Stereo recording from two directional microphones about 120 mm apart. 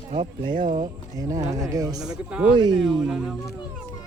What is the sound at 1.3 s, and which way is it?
Speech, 75° right (ahead or behind).